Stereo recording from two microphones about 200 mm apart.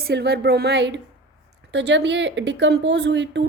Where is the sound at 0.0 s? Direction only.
55° right (ahead or behind).